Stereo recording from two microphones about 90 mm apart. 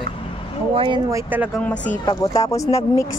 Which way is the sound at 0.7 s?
75° right (ahead or behind).